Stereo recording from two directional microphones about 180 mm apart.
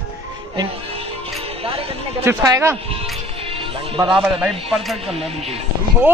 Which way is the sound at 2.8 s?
35° right (ahead or behind).